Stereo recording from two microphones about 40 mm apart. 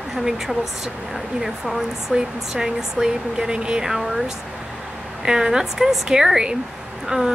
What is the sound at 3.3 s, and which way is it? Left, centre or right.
Speech, right.